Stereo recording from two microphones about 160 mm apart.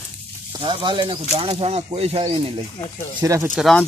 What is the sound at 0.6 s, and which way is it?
Speech, 30° right (ahead or behind).